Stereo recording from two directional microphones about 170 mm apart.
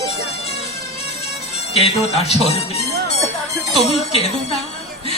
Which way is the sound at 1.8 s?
35° left (ahead or behind).